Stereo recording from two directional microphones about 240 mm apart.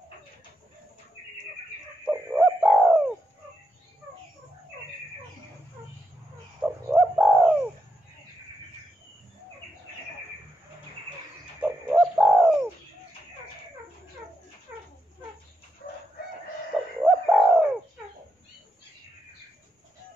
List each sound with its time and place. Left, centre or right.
2.0 s bird: centre
6.6 s bird: centre
11.6 s bird: centre
17.0 s bird: centre